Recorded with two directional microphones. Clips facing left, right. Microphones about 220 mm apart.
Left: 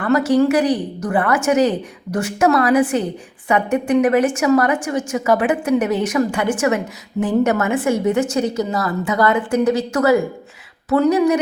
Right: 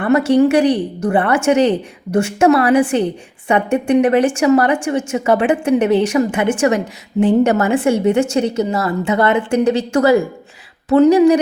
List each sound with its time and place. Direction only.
0.0 s a woman's voice: 25° right (ahead or behind)